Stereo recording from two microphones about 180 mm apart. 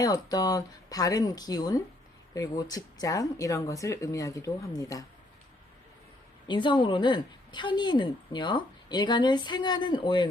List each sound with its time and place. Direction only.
0.0 s a woman's voice: 20° left (ahead or behind)
6.5 s a woman's voice: 25° left (ahead or behind)